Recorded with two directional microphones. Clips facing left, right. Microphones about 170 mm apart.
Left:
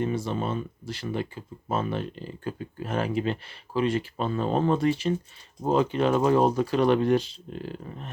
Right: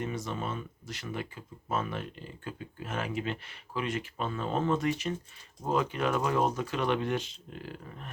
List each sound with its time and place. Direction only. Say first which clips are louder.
0.0 s speech: left 7 dB; 30° left (ahead or behind)